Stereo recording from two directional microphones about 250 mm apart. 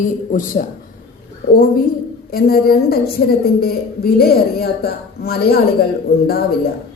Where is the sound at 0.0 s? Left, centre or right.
Left.